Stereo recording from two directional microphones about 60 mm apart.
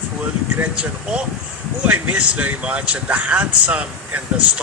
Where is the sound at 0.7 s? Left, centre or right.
Centre.